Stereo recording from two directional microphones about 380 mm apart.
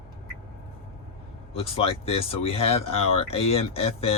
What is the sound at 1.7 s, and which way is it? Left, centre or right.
Speech, centre.